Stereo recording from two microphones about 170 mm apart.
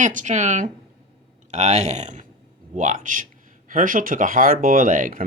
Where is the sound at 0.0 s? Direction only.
45° right (ahead or behind).